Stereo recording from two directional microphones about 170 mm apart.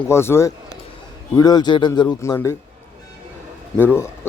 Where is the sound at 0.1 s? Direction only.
15° left (ahead or behind).